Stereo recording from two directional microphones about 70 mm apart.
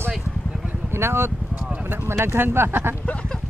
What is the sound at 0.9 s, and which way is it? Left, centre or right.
Speech, right.